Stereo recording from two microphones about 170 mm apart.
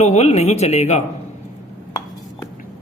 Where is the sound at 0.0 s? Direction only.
40° left (ahead or behind).